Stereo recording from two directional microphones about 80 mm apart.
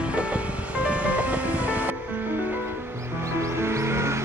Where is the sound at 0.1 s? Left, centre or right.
Centre.